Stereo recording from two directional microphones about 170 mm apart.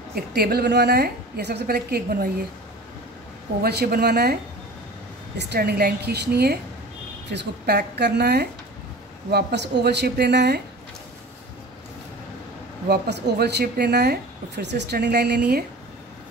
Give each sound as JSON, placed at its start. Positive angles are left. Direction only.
{"t": 0.1, "sound": "speech", "side_deg": -70}
{"t": 3.6, "sound": "speech", "side_deg": -65}
{"t": 5.4, "sound": "speech", "side_deg": -70}
{"t": 12.8, "sound": "speech", "side_deg": -70}